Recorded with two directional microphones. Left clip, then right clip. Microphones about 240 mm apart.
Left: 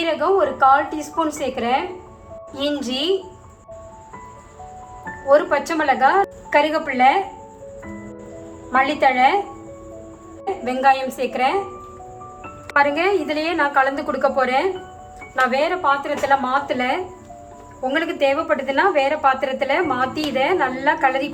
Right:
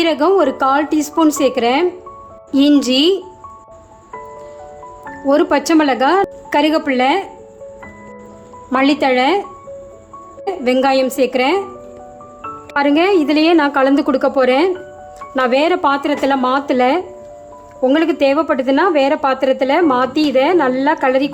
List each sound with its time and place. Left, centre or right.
0.0 s a woman's voice: right
5.3 s a woman's voice: right
8.7 s a woman's voice: right
10.6 s a woman's voice: right
12.7 s a woman's voice: right